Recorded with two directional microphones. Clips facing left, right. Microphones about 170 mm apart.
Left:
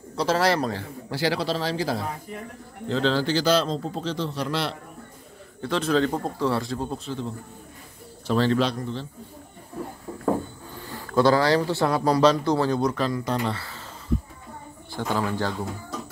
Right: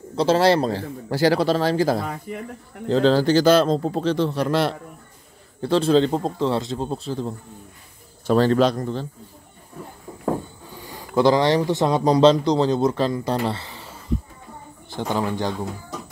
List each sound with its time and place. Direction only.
0.1 s a man's voice: 25° right (ahead or behind); by 4.7 s 50° right (ahead or behind)
5.6 s a man's voice: 30° right (ahead or behind)
10.8 s speech: 15° right (ahead or behind); by 13.7 s 30° right (ahead or behind)
14.9 s speech: 20° right (ahead or behind)